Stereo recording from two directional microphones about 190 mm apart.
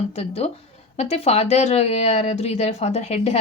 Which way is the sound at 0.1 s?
35° left (ahead or behind).